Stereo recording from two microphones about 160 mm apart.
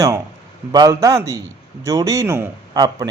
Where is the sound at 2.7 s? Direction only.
25° right (ahead or behind).